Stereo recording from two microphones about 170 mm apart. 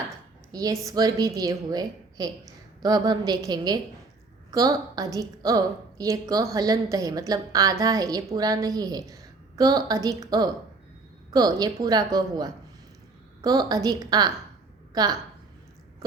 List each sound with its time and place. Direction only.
0.5 s a woman's voice: 20° right (ahead or behind)